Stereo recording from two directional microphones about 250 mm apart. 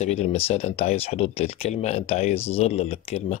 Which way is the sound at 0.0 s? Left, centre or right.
Left.